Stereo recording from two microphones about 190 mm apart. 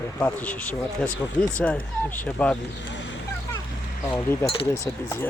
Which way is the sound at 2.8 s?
70° left (ahead or behind).